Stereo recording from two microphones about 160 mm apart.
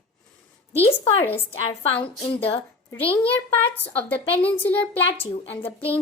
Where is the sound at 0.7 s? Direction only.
40° left (ahead or behind).